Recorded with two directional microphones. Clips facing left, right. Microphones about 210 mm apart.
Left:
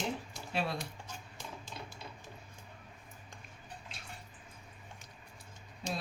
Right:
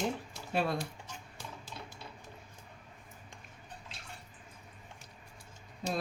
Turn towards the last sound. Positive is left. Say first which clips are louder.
# right 3 dB
turn(degrees=-50)  # may be behind; listen again after turning